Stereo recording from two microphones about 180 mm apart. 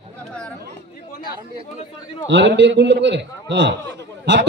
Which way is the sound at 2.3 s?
85° right.